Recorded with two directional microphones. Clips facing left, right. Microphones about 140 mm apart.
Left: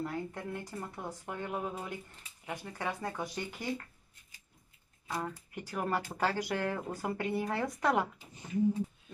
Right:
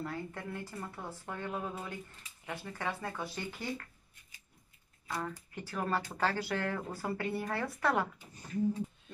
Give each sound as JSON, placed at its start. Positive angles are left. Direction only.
{"t": 0.0, "sound": "speech", "side_deg": 15}
{"t": 5.0, "sound": "speech", "side_deg": 15}